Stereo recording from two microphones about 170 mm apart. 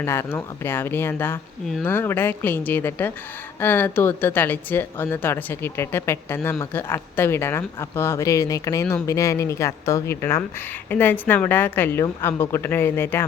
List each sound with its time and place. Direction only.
0.0 s speech: 15° left (ahead or behind)